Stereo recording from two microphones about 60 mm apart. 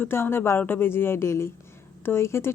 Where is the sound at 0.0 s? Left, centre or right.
Left.